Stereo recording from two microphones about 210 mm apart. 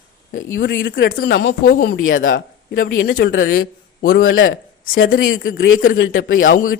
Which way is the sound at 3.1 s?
60° left (ahead or behind).